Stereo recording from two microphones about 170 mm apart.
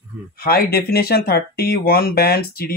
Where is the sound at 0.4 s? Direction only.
60° left (ahead or behind).